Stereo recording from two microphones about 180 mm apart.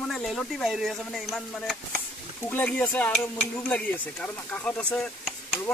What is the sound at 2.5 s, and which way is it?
Speech, 10° left (ahead or behind).